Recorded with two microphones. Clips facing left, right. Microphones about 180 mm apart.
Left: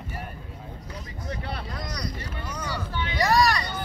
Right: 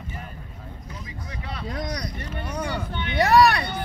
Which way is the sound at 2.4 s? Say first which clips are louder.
Right 5 dB; 65° right (ahead or behind).